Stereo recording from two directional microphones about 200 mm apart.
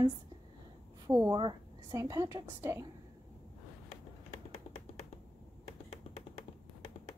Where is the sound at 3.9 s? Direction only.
30° left (ahead or behind).